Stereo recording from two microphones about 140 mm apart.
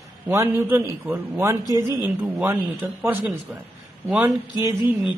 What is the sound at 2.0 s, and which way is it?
A woman's voice, 15° right (ahead or behind).